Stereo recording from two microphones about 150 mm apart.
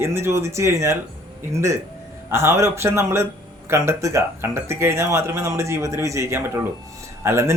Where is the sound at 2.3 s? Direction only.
15° right (ahead or behind).